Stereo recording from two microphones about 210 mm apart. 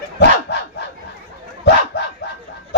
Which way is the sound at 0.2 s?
55° left (ahead or behind).